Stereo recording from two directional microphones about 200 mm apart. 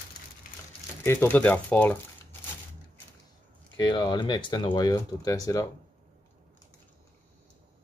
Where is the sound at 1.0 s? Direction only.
10° left (ahead or behind).